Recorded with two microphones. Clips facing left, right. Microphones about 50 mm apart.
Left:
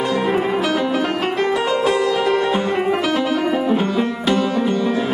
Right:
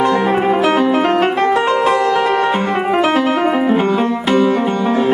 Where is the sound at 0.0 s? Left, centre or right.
Right.